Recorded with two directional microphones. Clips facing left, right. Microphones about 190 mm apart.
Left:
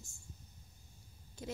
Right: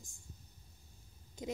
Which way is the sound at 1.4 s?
20° right (ahead or behind).